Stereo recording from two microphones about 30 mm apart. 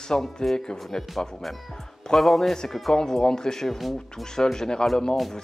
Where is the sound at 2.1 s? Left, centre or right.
Centre.